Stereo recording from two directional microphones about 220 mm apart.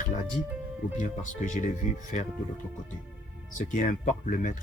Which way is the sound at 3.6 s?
35° left (ahead or behind).